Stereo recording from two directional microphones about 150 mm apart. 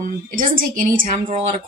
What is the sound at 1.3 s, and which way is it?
Speech, 45° right (ahead or behind).